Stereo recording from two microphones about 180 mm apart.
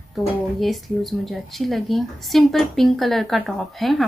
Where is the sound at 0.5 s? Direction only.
Centre (ahead or behind).